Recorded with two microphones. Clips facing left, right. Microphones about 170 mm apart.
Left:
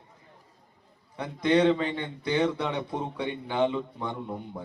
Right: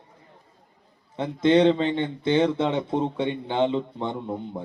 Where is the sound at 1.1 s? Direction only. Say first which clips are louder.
Right 5 dB; 25° right (ahead or behind).